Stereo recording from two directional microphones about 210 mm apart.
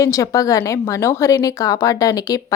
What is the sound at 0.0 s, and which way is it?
A woman's voice, 15° left (ahead or behind).